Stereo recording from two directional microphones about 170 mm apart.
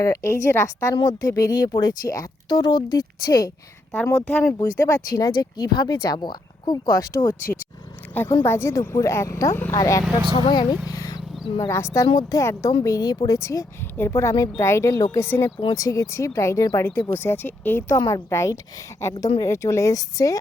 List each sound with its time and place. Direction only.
0.0 s speech: 15° left (ahead or behind)
3.9 s speech: 10° left (ahead or behind)
8.1 s a woman's voice: 10° left (ahead or behind)